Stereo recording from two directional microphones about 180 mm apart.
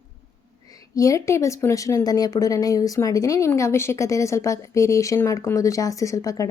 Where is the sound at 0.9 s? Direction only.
20° left (ahead or behind).